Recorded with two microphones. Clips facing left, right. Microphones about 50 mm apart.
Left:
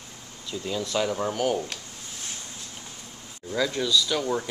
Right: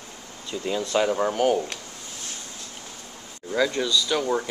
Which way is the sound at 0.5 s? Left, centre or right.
Right.